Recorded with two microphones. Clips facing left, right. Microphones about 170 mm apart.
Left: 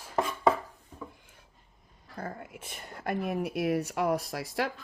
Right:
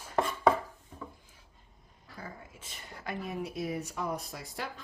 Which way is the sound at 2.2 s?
60° left (ahead or behind).